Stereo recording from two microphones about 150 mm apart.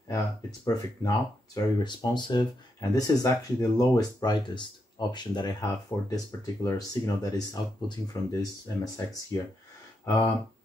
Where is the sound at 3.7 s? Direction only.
25° left (ahead or behind).